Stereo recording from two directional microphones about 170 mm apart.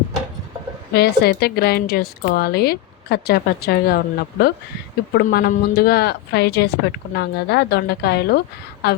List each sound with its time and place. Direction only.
0.9 s a woman's voice: 65° left (ahead or behind)